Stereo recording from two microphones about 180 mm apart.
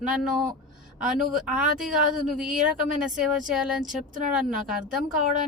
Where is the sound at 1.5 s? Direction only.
5° right (ahead or behind).